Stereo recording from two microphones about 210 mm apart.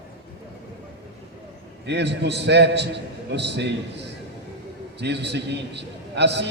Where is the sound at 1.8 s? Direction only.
55° right (ahead or behind).